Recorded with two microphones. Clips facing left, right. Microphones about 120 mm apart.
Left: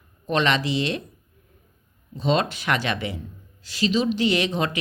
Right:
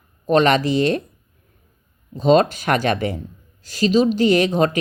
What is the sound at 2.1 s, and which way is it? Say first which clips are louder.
Speech: right 8 dB; 45° right (ahead or behind).